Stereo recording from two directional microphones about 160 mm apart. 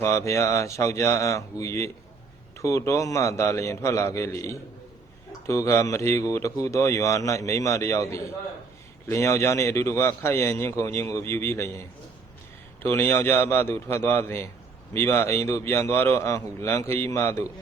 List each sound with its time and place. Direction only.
0.0 s speech: 20° left (ahead or behind)
12.8 s speech: 15° left (ahead or behind)